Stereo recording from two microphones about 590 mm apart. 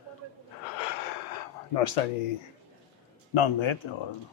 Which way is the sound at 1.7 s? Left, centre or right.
Left.